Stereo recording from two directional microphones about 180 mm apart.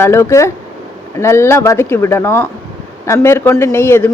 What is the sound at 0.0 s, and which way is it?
A woman's voice, 15° left (ahead or behind).